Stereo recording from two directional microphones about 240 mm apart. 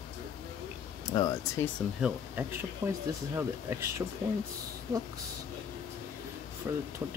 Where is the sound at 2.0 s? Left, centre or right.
Centre.